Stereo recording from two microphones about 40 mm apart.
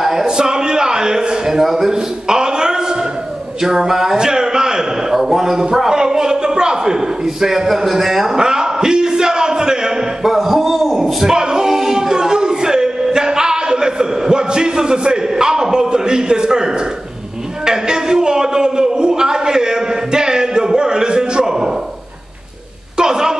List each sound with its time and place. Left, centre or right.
0.0 s a sound: centre
1.6 s a man's voice: centre
1.9 s a sound: centre
3.6 s a man's voice: centre
8.4 s a man's voice: centre
10.2 s a man's voice: centre
11.3 s music: centre
17.6 s a sound: centre
22.9 s a woman's voice: centre